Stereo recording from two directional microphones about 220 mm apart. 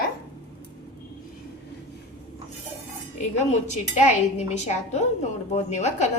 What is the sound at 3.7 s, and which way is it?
A woman's voice, 30° left (ahead or behind).